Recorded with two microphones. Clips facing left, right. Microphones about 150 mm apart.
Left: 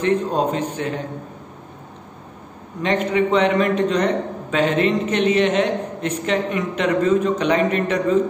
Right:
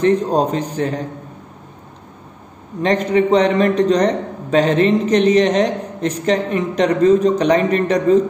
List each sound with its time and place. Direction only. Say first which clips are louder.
0.0 s a man's voice: right 4 dB; 40° right (ahead or behind)
2.8 s a man's voice: right 4 dB; 40° right (ahead or behind)